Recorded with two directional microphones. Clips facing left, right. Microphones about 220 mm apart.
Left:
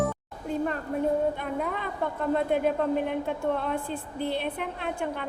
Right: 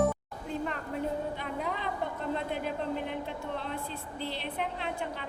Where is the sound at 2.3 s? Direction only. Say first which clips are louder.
Left 12 dB; 50° left (ahead or behind).